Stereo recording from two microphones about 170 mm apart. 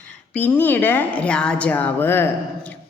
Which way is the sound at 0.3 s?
10° left (ahead or behind).